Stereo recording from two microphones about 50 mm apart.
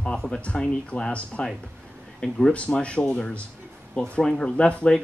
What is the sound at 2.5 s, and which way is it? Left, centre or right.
Speech, left.